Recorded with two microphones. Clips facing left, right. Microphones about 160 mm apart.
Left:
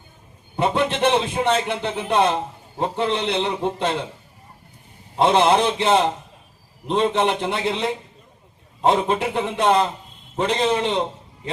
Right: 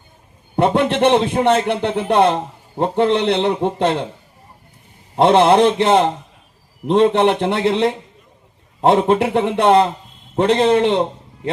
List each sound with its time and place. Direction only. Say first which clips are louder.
0.5 s a man's voice: right 5 dB; 60° right (ahead or behind)
5.1 s a man's voice: right 5 dB; 60° right (ahead or behind)